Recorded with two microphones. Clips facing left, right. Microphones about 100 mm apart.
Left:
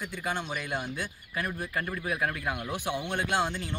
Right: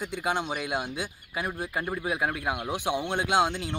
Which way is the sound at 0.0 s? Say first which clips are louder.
Right 4 dB; 20° right (ahead or behind).